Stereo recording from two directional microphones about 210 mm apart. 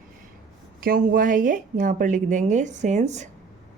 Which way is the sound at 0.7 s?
40° right (ahead or behind).